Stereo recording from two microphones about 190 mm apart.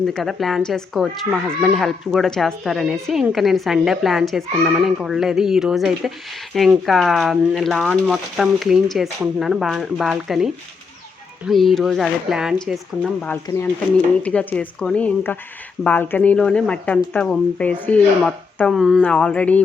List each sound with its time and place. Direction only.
0.0 s speech: centre (ahead or behind)